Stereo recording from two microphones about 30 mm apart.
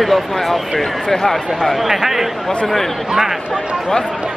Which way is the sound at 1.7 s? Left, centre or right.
Centre.